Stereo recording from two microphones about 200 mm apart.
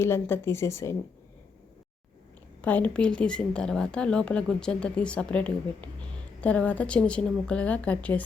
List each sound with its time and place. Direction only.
0.0 s speech: 10° left (ahead or behind)
2.6 s a woman's voice: 5° left (ahead or behind)